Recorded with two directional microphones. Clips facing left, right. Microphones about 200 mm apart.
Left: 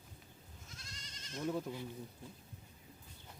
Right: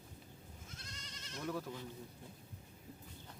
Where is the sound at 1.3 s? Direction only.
25° left (ahead or behind).